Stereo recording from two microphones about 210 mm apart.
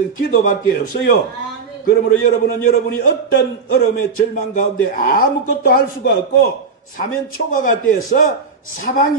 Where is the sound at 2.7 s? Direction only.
45° left (ahead or behind).